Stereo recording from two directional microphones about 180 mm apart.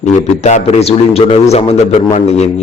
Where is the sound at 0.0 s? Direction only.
40° left (ahead or behind).